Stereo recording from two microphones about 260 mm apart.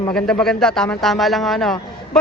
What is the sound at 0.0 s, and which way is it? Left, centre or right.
Speech, centre.